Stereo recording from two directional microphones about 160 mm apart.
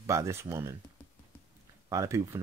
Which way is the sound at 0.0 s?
20° right (ahead or behind).